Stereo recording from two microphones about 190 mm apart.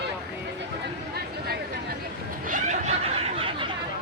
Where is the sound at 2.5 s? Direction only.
35° right (ahead or behind).